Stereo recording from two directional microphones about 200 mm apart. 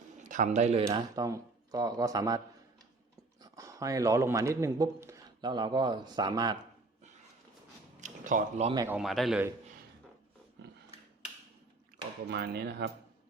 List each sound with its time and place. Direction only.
0.2 s a man's voice: 40° right (ahead or behind)
0.9 s speech: 15° right (ahead or behind)
3.4 s a man's voice: 15° right (ahead or behind)
7.9 s a sound: 40° right (ahead or behind)
8.7 s speech: 15° right (ahead or behind)
9.0 s a man's voice: centre (ahead or behind)
12.3 s speech: 55° right (ahead or behind)